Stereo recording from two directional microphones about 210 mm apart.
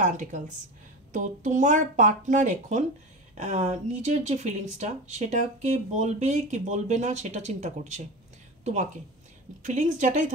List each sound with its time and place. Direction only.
0.0 s a woman's voice: 35° right (ahead or behind)
9.6 s speech: 35° right (ahead or behind)